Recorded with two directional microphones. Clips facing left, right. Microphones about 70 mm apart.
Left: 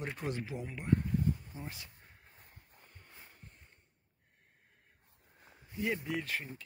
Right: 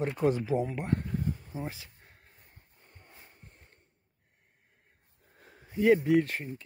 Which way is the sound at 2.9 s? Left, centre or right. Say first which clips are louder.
Right 3 dB; right.